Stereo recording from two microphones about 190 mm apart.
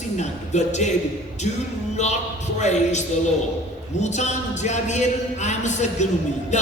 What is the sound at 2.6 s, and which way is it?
Music, 40° left (ahead or behind).